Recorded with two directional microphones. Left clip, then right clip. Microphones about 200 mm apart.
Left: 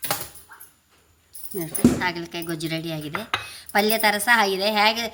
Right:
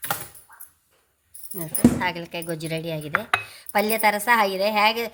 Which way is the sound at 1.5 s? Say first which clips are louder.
Even; 35° right (ahead or behind).